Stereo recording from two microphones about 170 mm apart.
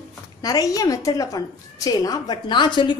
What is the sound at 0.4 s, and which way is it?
A woman's voice, 20° left (ahead or behind).